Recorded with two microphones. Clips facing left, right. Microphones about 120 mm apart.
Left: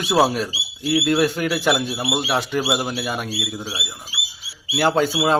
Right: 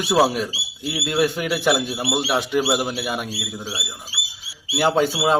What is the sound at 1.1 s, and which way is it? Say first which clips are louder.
Speech: right 1 dB; 15° right (ahead or behind).